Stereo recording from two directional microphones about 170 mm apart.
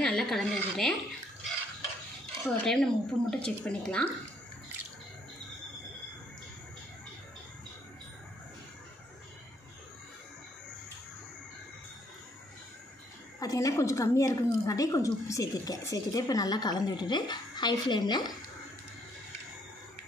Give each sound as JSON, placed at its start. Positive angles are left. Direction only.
{"t": 0.0, "sound": "speech", "side_deg": 0}
{"t": 2.4, "sound": "speech", "side_deg": 5}
{"t": 13.4, "sound": "a woman's voice", "side_deg": 20}